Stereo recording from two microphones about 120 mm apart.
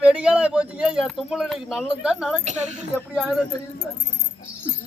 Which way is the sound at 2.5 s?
75° right (ahead or behind).